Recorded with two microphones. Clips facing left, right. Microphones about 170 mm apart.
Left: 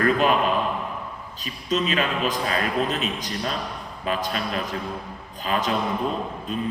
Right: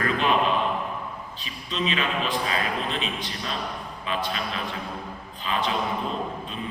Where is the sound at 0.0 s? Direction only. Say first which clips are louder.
Left 4 dB; 45° left (ahead or behind).